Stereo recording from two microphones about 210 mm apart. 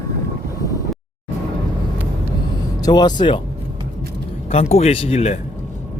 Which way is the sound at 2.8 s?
20° left (ahead or behind).